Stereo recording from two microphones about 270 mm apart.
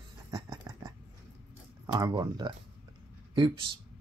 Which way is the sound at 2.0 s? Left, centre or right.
Centre.